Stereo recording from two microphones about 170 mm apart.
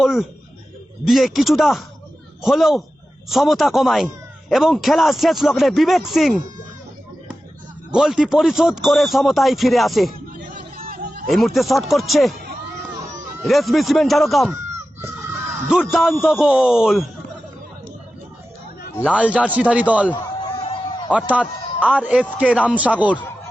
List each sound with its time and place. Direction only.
0.0 s a sound: centre (ahead or behind)
1.0 s a man's voice: centre (ahead or behind)
7.9 s a man's voice: 5° right (ahead or behind)
10.8 s a sound: 60° right (ahead or behind)
11.3 s a man's voice: centre (ahead or behind)
13.4 s a man's voice: centre (ahead or behind)
15.9 s a man's voice: centre (ahead or behind)
19.0 s speech: 5° right (ahead or behind)
20.5 s a sound: 30° left (ahead or behind)
21.1 s a man's voice: 10° right (ahead or behind)